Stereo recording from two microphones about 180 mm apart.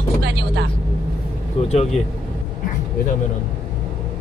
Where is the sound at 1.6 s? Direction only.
30° left (ahead or behind).